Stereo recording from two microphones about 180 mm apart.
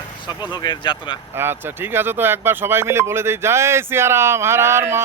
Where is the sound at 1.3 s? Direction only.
10° right (ahead or behind).